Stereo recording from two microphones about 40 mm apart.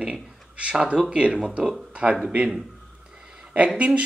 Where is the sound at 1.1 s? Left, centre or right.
Right.